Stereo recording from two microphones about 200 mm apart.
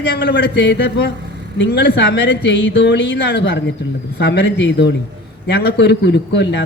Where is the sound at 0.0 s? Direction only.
55° left (ahead or behind).